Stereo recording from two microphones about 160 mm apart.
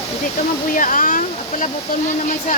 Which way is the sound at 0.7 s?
55° left (ahead or behind).